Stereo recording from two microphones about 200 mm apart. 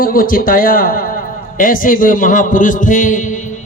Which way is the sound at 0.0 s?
45° left (ahead or behind).